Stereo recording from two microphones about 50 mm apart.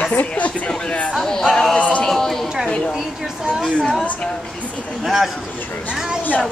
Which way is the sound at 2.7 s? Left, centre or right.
Left.